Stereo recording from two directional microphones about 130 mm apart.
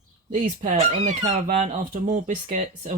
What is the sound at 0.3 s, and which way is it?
Speech, 75° right (ahead or behind).